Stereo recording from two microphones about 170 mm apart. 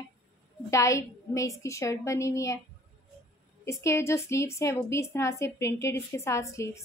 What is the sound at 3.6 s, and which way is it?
A woman's voice, 15° left (ahead or behind).